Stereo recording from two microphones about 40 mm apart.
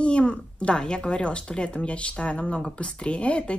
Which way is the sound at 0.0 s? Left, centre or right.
Left.